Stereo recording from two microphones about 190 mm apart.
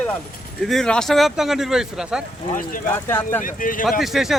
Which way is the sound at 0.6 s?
Centre (ahead or behind).